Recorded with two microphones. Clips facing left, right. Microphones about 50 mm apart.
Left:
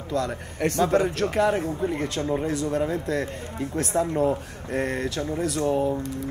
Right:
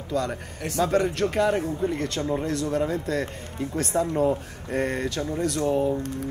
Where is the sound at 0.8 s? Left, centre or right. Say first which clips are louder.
Right 2 dB; centre.